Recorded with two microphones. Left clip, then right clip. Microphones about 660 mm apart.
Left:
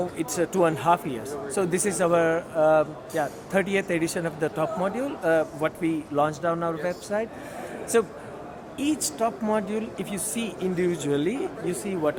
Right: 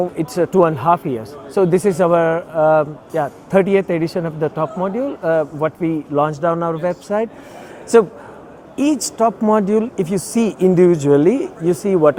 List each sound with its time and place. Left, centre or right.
0.2 s speech: right